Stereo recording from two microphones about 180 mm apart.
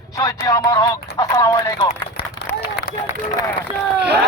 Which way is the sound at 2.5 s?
10° left (ahead or behind).